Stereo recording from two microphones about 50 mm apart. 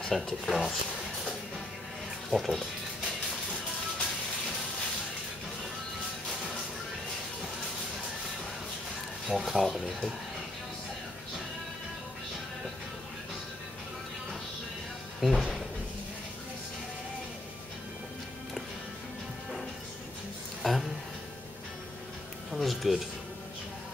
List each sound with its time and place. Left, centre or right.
0.1 s speech: centre
2.3 s speech: centre
9.3 s speech: centre
15.1 s speech: centre
20.6 s music: centre
22.5 s music: centre